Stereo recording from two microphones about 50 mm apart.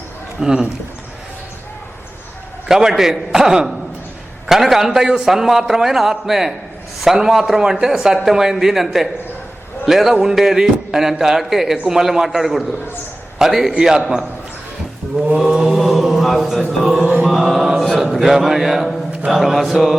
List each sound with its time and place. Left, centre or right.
0.3 s a man's voice: centre
2.6 s a man's voice: centre
13.4 s mantra: centre
13.7 s a man's voice: centre
15.4 s mantra: centre